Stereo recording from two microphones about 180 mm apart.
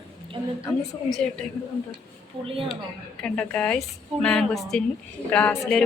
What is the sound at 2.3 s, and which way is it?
Speech, 30° right (ahead or behind).